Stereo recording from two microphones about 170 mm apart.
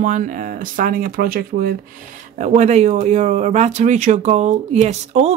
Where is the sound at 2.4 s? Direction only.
45° right (ahead or behind).